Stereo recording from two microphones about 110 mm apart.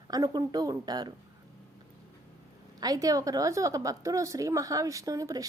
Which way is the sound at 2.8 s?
35° right (ahead or behind).